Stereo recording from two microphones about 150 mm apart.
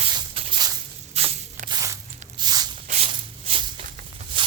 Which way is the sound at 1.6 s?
25° right (ahead or behind).